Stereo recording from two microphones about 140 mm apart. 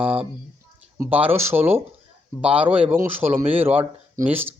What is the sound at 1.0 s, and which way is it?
Speech, 15° right (ahead or behind).